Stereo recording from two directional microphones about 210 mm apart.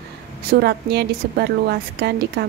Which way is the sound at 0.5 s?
50° right (ahead or behind).